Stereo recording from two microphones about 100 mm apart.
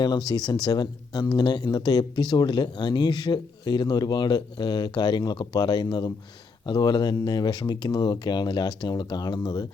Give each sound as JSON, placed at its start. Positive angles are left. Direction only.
{"t": 0.3, "sound": "speech", "side_deg": 45}